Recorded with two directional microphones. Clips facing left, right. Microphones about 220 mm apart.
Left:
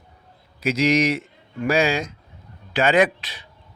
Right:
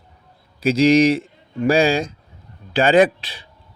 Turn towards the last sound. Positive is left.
turn(degrees=-30)  # may be behind; listen again after turning